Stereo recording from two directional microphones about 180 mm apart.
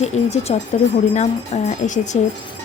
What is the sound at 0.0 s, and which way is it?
Speech, 40° left (ahead or behind).